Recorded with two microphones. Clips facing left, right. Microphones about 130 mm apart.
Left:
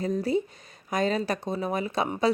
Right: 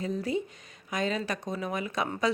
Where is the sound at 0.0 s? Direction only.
35° left (ahead or behind).